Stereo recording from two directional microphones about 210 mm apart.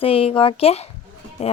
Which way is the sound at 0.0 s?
25° left (ahead or behind).